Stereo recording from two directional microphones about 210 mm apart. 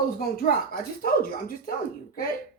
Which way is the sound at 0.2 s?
45° left (ahead or behind).